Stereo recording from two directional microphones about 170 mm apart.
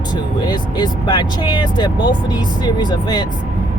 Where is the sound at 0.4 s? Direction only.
25° left (ahead or behind).